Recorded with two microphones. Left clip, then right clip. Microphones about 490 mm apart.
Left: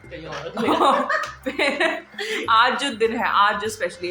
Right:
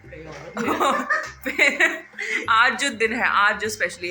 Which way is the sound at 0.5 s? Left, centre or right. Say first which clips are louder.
Left 3 dB; right.